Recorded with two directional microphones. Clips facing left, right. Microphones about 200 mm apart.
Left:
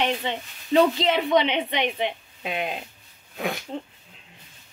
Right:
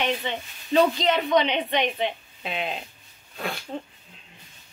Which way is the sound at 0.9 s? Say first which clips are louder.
Left 1 dB; 25° left (ahead or behind).